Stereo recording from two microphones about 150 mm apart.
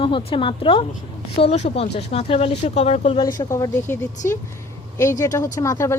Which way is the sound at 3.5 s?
15° left (ahead or behind).